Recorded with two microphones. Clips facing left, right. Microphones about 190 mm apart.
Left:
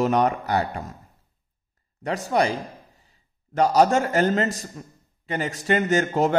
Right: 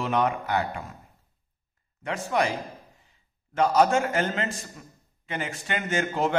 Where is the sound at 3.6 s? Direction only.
40° left (ahead or behind).